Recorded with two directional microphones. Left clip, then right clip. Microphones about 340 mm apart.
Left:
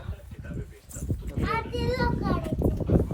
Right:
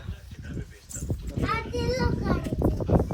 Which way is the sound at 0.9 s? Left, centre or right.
Centre.